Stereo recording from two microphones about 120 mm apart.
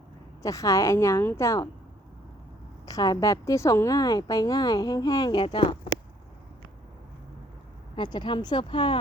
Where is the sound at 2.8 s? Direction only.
30° left (ahead or behind).